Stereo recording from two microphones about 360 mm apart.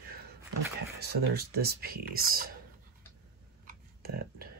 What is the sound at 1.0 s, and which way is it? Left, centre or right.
Speech, right.